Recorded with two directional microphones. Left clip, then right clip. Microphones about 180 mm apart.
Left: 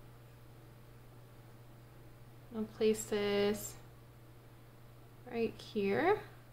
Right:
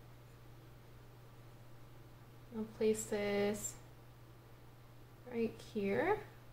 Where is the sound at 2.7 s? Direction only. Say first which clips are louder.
Left 3 dB; 35° left (ahead or behind).